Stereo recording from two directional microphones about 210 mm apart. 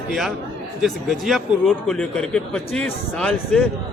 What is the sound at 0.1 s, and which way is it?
A man's voice, centre (ahead or behind).